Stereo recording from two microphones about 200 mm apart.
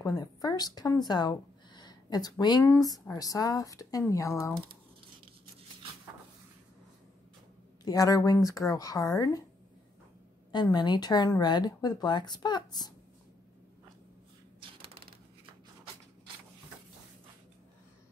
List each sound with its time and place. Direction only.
0.0 s speech: 20° left (ahead or behind)
7.8 s speech: 20° left (ahead or behind)
10.5 s speech: 20° left (ahead or behind)